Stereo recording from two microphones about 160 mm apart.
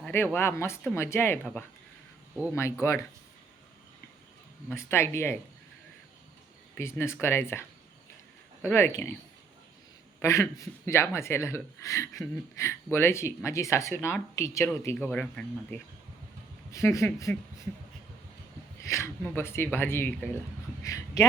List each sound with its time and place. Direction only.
0.0 s a sound: 15° left (ahead or behind)
0.3 s speech: 15° left (ahead or behind)
2.5 s speech: 15° left (ahead or behind)
4.7 s speech: 15° left (ahead or behind)
6.7 s speech: 15° left (ahead or behind)
8.6 s speech: 15° left (ahead or behind)
10.2 s speech: 15° left (ahead or behind)
14.9 s speech: 5° left (ahead or behind)
16.7 s speech: 20° left (ahead or behind)
18.8 s speech: 20° left (ahead or behind)